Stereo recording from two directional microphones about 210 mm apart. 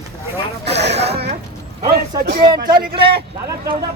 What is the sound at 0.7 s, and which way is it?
Speech, 55° right (ahead or behind).